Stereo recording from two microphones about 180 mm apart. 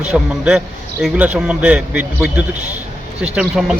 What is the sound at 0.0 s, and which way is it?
A man's voice, 5° right (ahead or behind).